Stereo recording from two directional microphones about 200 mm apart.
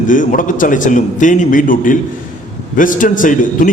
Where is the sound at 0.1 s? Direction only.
40° left (ahead or behind).